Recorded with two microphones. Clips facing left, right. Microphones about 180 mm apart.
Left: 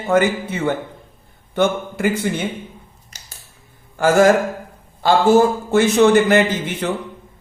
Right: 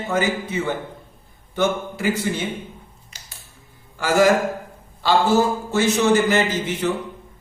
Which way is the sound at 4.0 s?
50° left (ahead or behind).